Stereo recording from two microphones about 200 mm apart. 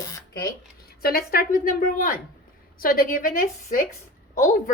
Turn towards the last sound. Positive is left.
turn(degrees=40)  # may be behind; listen again after turning